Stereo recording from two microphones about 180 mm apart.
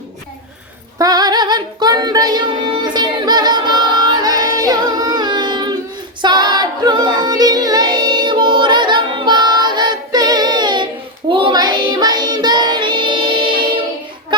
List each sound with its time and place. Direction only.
0.9 s a sound: 20° right (ahead or behind)
2.8 s child singing: 25° right (ahead or behind)
6.2 s music: 25° right (ahead or behind)
11.3 s child singing: 25° right (ahead or behind)